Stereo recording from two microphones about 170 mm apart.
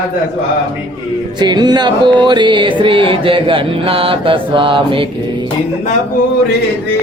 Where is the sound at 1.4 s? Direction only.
25° right (ahead or behind).